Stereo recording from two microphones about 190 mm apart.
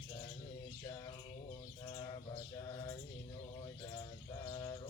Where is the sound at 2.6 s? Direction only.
15° left (ahead or behind).